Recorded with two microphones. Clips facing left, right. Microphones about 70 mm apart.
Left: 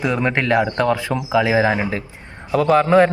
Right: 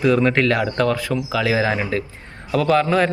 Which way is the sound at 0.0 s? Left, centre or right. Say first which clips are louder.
Right 3 dB; centre.